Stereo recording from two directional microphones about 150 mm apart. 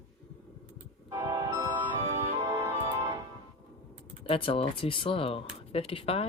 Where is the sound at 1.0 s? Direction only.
25° right (ahead or behind).